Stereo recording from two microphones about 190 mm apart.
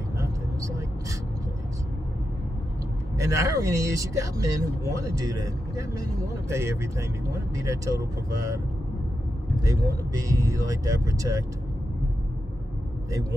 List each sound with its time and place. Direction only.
3.2 s speech: 15° right (ahead or behind)
10.2 s speech: 15° right (ahead or behind)